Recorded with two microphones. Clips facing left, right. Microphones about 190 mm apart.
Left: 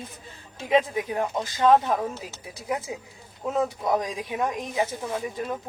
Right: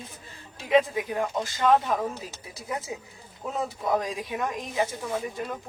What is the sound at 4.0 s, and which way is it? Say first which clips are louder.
Speech: left 2 dB; 15° left (ahead or behind).